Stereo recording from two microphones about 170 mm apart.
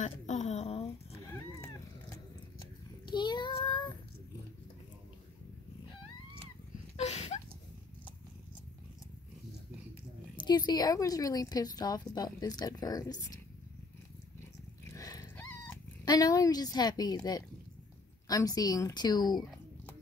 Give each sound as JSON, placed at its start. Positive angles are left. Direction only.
{"t": 0.0, "sound": "a sound", "side_deg": 45}
{"t": 1.2, "sound": "cat", "side_deg": 15}
{"t": 3.1, "sound": "child singing", "side_deg": 25}
{"t": 7.0, "sound": "a sound", "side_deg": 40}
{"t": 10.3, "sound": "a woman's voice", "side_deg": 25}
{"t": 15.0, "sound": "dog", "side_deg": 20}
{"t": 15.3, "sound": "dog", "side_deg": 10}
{"t": 16.1, "sound": "a woman's voice", "side_deg": 20}